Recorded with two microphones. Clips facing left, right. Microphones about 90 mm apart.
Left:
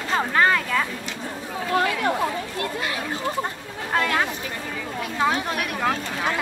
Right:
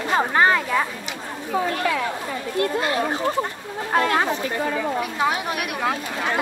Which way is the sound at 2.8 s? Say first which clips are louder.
Right 5 dB; 45° right (ahead or behind).